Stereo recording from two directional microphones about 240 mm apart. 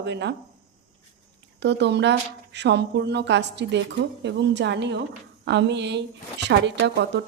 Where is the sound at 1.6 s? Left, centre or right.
Right.